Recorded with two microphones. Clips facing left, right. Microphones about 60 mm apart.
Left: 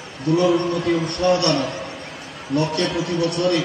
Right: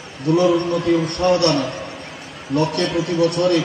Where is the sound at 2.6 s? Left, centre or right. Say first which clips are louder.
Right 2 dB; right.